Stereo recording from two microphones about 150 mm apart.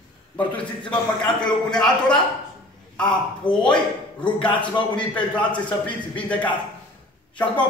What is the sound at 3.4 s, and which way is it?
Speech, 30° left (ahead or behind).